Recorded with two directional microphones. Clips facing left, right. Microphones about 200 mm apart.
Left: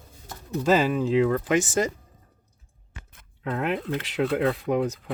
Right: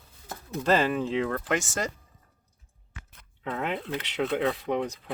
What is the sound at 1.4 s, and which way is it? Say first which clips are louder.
Speech: left 6 dB; 15° left (ahead or behind).